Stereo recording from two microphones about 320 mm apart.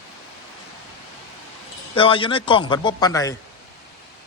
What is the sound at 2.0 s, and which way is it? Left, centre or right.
Speech, centre.